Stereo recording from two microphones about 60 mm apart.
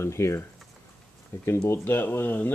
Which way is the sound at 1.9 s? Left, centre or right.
Left.